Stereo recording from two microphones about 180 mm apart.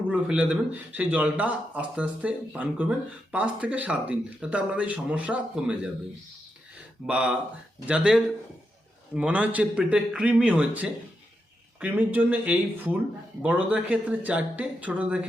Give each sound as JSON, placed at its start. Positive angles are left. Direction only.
{"t": 0.1, "sound": "speech", "side_deg": -5}
{"t": 7.1, "sound": "speech", "side_deg": -5}